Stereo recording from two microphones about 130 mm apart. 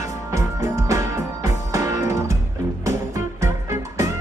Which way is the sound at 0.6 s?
25° right (ahead or behind).